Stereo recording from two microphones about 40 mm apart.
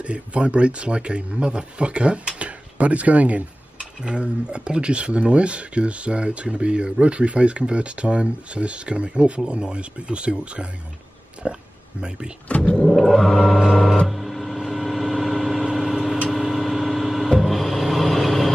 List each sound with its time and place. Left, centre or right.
0.0 s a man's voice: right
4.0 s speech: right
11.4 s speech: centre
12.4 s speech: left
12.7 s a sound: centre
14.0 s vehicle: centre